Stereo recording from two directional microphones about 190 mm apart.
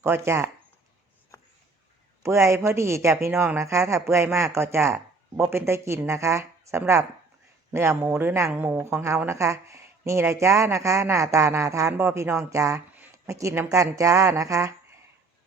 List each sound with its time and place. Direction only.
0.0 s speech: 15° right (ahead or behind)
2.2 s speech: 15° right (ahead or behind)